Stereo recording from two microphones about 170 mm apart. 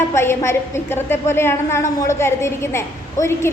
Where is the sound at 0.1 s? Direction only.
15° left (ahead or behind).